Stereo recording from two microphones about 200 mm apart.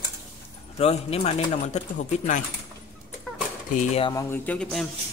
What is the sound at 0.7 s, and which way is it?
Speech, 30° left (ahead or behind).